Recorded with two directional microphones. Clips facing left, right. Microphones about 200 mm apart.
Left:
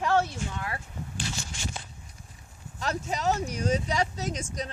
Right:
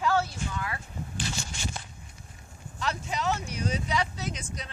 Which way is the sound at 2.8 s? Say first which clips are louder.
Left 1 dB; 45° left (ahead or behind).